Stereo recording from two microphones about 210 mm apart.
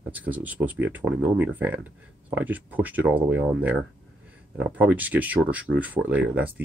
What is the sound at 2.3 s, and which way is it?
Speech, 10° right (ahead or behind).